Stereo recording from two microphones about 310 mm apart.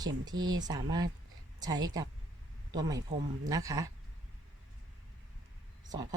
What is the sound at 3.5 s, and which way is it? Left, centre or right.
Speech, centre.